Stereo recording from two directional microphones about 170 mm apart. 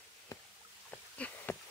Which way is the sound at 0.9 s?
10° left (ahead or behind).